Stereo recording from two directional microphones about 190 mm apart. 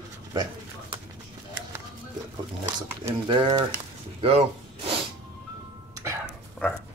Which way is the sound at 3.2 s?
25° right (ahead or behind).